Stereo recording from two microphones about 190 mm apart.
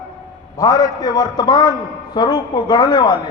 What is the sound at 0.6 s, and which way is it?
A man's voice, 20° left (ahead or behind).